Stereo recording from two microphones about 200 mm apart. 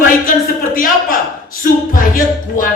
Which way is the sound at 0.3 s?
45° left (ahead or behind).